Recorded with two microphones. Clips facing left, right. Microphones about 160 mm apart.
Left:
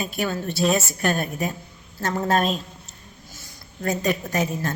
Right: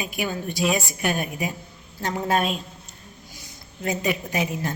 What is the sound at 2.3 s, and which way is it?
Speech, 40° left (ahead or behind).